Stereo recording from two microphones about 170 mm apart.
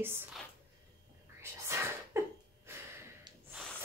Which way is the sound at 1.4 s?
15° right (ahead or behind).